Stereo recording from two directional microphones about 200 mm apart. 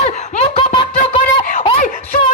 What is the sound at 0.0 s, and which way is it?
Snicker, 35° left (ahead or behind).